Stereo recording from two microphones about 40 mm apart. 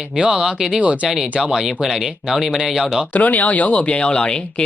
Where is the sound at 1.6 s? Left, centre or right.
Centre.